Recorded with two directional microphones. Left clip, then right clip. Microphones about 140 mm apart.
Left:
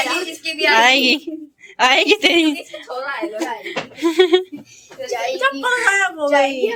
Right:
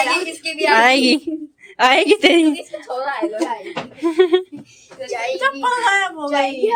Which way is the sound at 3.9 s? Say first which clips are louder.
Left 1 dB; centre (ahead or behind).